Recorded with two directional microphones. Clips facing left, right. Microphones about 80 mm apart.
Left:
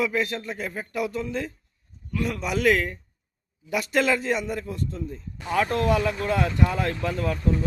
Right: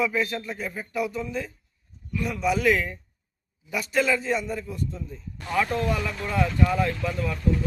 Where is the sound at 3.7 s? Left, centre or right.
Left.